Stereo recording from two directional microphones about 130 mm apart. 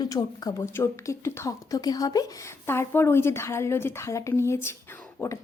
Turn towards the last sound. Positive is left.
turn(degrees=15)  # may be behind; listen again after turning